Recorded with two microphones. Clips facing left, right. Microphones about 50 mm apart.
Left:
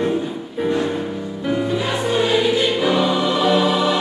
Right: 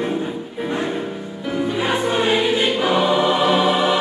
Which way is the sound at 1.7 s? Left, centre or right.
Right.